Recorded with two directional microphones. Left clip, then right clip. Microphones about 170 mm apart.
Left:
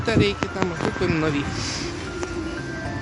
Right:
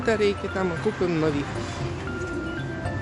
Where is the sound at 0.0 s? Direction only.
20° right (ahead or behind).